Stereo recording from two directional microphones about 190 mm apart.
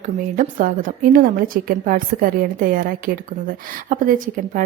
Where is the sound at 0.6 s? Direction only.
45° right (ahead or behind).